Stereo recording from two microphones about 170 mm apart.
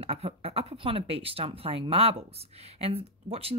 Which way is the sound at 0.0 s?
35° right (ahead or behind).